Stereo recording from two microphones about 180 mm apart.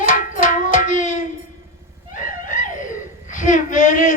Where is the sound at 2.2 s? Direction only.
45° left (ahead or behind).